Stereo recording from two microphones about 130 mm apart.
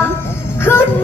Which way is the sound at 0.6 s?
20° left (ahead or behind).